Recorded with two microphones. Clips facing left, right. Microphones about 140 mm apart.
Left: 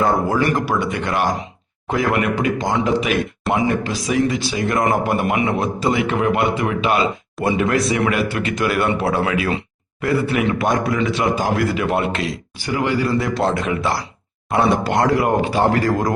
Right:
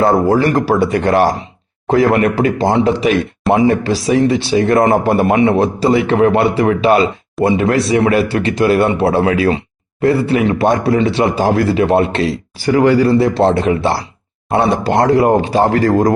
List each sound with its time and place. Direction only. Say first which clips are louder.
0.0 s speech: right 6 dB; 35° right (ahead or behind)
12.6 s speech: right 9 dB; 40° right (ahead or behind)